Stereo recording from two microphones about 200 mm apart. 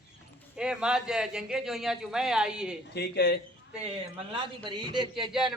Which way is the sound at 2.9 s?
55° left (ahead or behind).